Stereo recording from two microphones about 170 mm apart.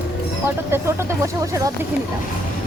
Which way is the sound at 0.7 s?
15° right (ahead or behind).